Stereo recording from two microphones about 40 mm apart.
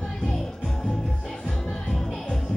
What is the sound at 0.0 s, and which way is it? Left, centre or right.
Music, centre.